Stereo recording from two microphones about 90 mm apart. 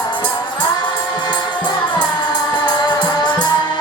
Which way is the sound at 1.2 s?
55° left (ahead or behind).